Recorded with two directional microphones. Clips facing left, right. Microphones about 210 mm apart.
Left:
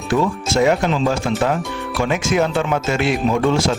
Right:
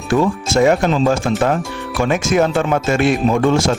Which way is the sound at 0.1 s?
45° right (ahead or behind).